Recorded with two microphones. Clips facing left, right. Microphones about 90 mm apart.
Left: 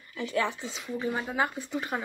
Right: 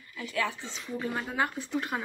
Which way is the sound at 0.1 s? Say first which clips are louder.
Left 3 dB; 30° left (ahead or behind).